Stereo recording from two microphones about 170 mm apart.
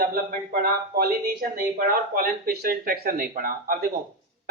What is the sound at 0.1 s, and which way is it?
Speech, 60° right (ahead or behind).